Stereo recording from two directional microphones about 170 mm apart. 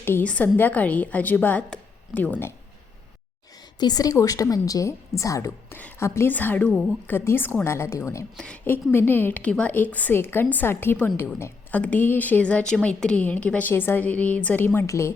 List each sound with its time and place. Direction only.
0.0 s a woman's voice: 10° left (ahead or behind)
3.8 s a woman's voice: 25° left (ahead or behind)
8.4 s a woman's voice: 5° left (ahead or behind)